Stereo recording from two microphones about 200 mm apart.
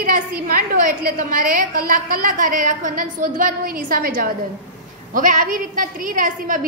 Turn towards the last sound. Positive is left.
turn(degrees=-40)  # may be behind; listen again after turning